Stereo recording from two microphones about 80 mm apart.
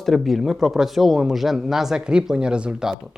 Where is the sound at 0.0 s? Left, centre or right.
Centre.